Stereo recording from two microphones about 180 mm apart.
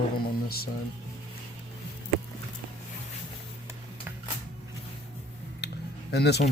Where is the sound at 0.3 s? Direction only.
60° left (ahead or behind).